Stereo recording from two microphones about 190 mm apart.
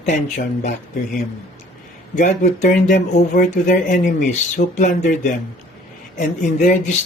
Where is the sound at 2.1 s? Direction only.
40° left (ahead or behind).